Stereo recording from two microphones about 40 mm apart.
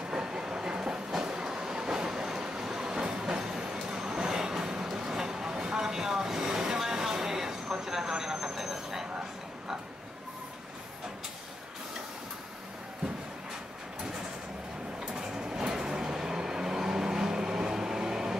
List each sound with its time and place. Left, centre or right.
0.1 s train: centre
4.9 s vehicle: centre
7.8 s train: centre
15.0 s vehicle: centre